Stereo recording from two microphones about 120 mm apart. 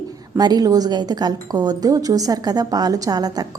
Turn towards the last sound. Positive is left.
turn(degrees=-35)  # may be behind; listen again after turning